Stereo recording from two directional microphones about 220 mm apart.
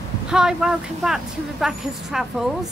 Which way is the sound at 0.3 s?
5° right (ahead or behind).